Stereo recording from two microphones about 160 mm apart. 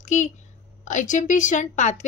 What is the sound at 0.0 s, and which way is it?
A woman's voice, 50° left (ahead or behind).